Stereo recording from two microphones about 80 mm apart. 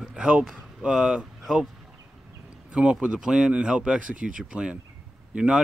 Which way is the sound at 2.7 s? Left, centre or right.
Centre.